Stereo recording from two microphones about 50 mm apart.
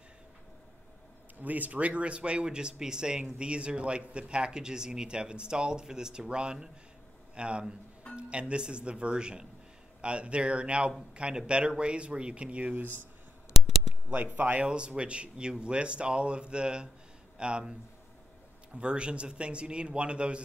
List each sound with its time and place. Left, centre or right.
1.4 s speech: right
13.5 s a sound: centre
14.1 s speech: right; by 17.7 s centre
18.8 s speech: right